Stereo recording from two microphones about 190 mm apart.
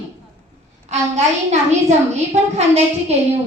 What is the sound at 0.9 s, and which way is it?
Speech, 35° right (ahead or behind).